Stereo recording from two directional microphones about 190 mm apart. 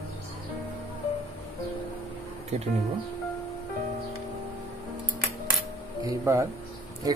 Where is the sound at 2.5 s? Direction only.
35° right (ahead or behind).